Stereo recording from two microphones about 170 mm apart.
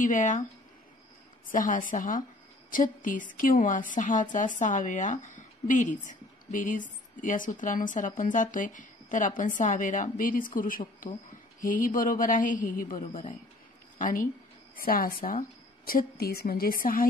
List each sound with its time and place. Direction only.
0.0 s a woman's voice: 50° left (ahead or behind)
1.5 s a woman's voice: 50° left (ahead or behind)